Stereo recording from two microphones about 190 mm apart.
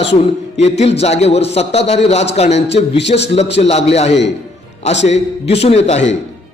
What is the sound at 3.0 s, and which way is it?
Speech, 65° left (ahead or behind).